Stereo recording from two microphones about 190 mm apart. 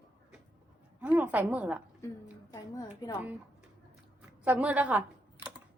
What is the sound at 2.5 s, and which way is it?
Speech, 20° left (ahead or behind).